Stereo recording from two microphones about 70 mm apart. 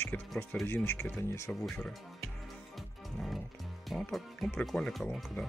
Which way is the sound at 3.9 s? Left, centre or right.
Centre.